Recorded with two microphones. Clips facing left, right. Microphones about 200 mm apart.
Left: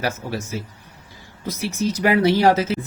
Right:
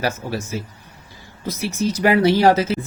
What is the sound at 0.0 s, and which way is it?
Speech, 35° right (ahead or behind).